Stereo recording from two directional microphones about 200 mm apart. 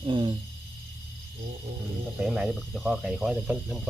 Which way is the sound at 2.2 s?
Centre (ahead or behind).